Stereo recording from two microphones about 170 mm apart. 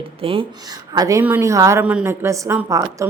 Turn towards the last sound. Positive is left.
turn(degrees=-20)  # may be behind; listen again after turning